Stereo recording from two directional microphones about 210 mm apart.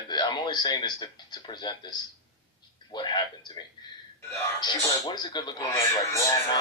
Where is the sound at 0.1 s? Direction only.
20° left (ahead or behind).